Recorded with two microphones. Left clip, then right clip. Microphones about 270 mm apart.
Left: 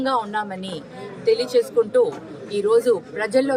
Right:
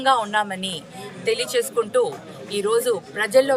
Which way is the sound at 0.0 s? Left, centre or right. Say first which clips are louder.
Right 3 dB; centre.